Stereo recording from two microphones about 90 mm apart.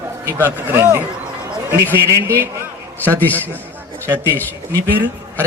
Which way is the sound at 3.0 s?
20° left (ahead or behind).